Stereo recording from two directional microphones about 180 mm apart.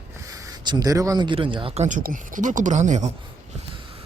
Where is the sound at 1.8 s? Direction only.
45° right (ahead or behind).